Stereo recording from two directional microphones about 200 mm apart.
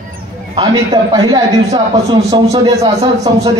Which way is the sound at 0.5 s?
20° right (ahead or behind).